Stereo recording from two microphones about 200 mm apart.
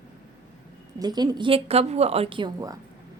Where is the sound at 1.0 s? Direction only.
20° right (ahead or behind).